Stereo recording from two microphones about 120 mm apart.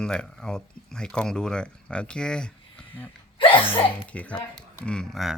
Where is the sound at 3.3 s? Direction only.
45° left (ahead or behind).